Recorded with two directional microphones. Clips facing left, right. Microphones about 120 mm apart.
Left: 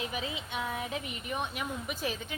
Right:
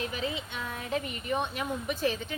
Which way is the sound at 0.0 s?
10° left (ahead or behind).